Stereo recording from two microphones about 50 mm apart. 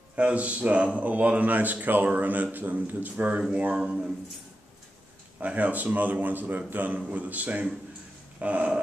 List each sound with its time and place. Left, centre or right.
0.1 s speech: right
5.4 s speech: right